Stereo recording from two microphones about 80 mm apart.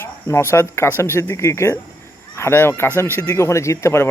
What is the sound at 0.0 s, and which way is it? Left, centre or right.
Speech, left.